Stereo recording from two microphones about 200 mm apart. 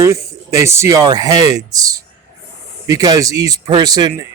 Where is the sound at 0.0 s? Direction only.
15° right (ahead or behind).